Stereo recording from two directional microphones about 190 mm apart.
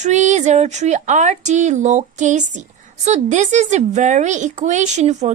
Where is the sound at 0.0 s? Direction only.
40° right (ahead or behind).